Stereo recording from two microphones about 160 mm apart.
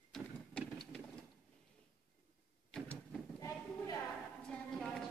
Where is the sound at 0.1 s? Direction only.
5° left (ahead or behind).